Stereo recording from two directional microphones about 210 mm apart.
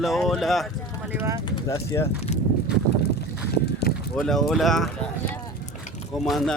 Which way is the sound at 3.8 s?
50° left (ahead or behind).